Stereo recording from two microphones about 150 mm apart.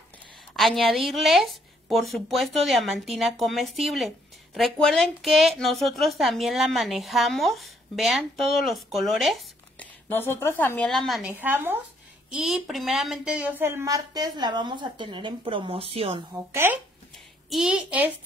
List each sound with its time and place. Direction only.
0.6 s a woman's voice: centre (ahead or behind)
10.0 s speech: 15° left (ahead or behind)
10.9 s a woman's voice: centre (ahead or behind)
11.2 s a woman's voice: 10° right (ahead or behind); by 16.2 s 40° right (ahead or behind)
17.1 s a child's voice: centre (ahead or behind)